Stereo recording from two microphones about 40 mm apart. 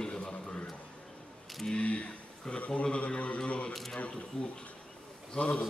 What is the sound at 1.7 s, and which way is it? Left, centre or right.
Speech, left.